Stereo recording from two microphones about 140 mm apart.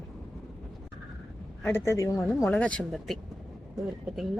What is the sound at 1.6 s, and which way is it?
Speech, 20° left (ahead or behind).